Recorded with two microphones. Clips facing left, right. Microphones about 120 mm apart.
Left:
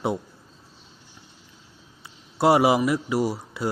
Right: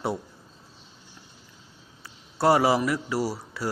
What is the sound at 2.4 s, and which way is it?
Speech, 20° left (ahead or behind).